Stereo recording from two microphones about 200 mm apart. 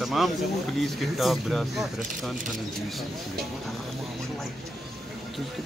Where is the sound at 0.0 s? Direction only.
Centre (ahead or behind).